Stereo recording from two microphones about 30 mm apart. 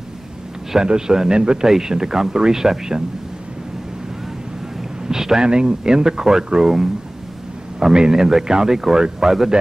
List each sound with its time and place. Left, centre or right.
0.8 s speech: right
5.0 s a sound: centre
5.4 s speech: right; by 9.5 s centre